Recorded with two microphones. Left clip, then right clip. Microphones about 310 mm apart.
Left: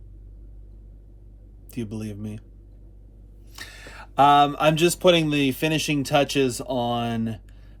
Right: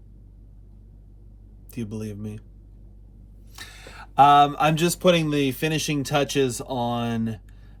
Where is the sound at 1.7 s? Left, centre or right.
Centre.